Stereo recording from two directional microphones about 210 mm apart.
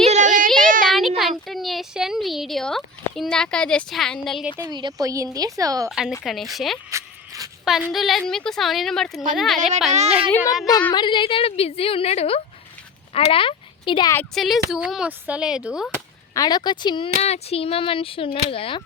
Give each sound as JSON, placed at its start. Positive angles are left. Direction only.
{"t": 0.1, "sound": "child singing", "side_deg": -35}
{"t": 0.9, "sound": "a sound", "side_deg": 0}
{"t": 4.5, "sound": "a woman's voice", "side_deg": -10}
{"t": 5.9, "sound": "speech", "side_deg": -5}
{"t": 6.9, "sound": "a sound", "side_deg": -15}
{"t": 7.6, "sound": "speech", "side_deg": 0}
{"t": 9.9, "sound": "a child's voice", "side_deg": -30}
{"t": 10.7, "sound": "a woman's voice", "side_deg": 20}
{"t": 14.2, "sound": "speech", "side_deg": 0}
{"t": 16.3, "sound": "a woman's voice", "side_deg": 20}